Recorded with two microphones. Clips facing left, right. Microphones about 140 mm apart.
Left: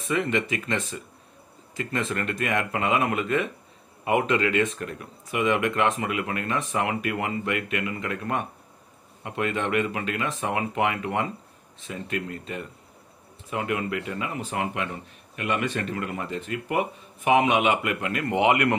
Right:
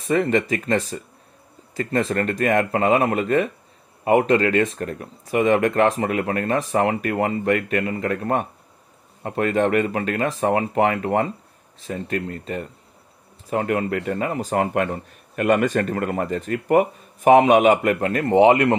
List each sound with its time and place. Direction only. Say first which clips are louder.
0.0 s speech: right 6 dB; 40° right (ahead or behind)